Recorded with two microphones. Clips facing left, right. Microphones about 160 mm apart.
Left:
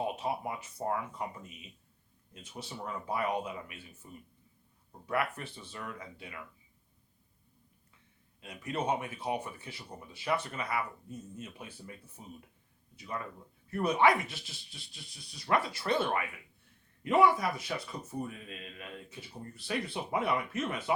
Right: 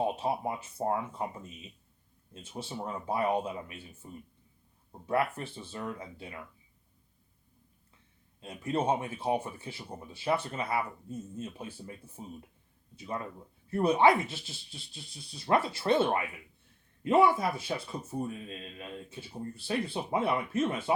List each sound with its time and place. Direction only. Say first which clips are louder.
0.0 s speech: right 4 dB; 30° right (ahead or behind)
8.4 s speech: right 4 dB; 30° right (ahead or behind)